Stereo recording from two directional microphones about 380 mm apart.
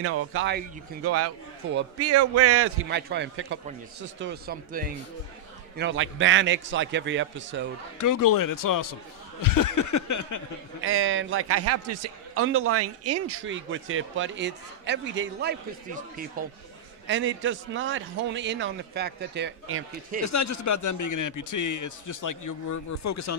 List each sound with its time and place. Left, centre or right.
0.0 s a man's voice: right
8.0 s a man's voice: left
10.8 s a man's voice: right
20.2 s a man's voice: left